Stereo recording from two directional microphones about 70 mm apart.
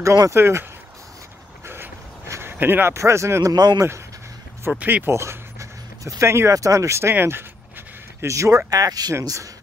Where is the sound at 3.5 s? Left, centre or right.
Right.